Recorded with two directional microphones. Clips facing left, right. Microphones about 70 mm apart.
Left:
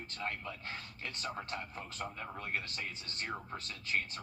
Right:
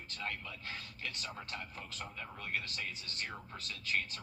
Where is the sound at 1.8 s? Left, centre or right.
Left.